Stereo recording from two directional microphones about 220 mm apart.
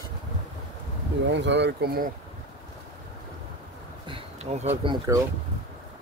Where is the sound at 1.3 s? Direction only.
55° right (ahead or behind).